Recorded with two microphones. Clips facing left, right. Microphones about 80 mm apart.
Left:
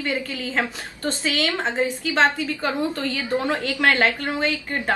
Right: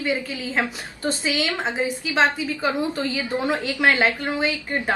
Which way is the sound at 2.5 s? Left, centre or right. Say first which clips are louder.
Right 1 dB; centre.